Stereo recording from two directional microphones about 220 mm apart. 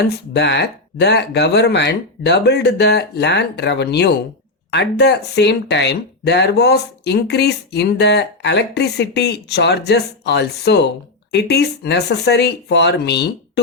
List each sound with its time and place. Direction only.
0.3 s speech: 50° left (ahead or behind)